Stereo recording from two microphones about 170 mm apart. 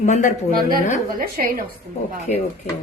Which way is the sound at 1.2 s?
60° right (ahead or behind).